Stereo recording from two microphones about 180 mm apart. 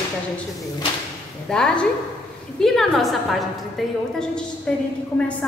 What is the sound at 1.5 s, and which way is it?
A woman's voice, 5° left (ahead or behind).